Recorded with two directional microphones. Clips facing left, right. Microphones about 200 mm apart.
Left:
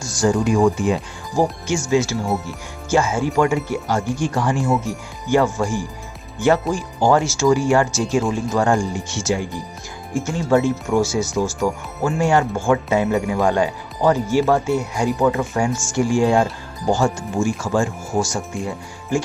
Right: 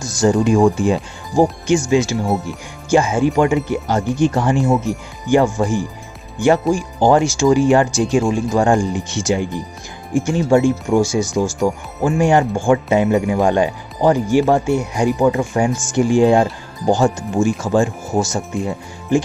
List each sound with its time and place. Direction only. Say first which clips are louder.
0.0 s speech: right 3 dB; 20° right (ahead or behind)
1.3 s speech: right 5 dB; 15° right (ahead or behind)